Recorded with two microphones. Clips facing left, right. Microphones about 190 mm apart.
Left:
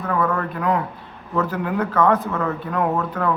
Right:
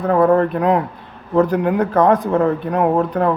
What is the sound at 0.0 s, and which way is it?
A man's voice, 35° right (ahead or behind).